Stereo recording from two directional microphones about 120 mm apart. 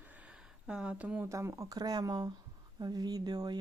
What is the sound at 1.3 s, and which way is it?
Speech, 25° right (ahead or behind).